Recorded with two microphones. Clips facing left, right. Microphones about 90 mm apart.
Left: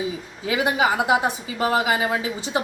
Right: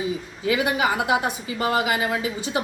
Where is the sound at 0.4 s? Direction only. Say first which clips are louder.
Left 1 dB; 20° left (ahead or behind).